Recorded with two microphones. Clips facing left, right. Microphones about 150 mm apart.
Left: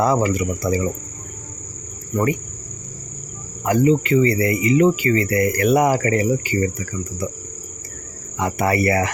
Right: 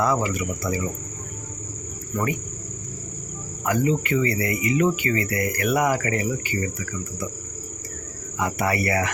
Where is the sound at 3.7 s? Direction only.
25° left (ahead or behind).